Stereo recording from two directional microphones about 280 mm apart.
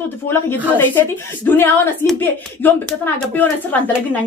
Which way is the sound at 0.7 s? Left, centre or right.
Centre.